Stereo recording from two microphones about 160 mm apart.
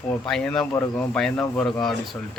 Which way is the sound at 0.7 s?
15° left (ahead or behind).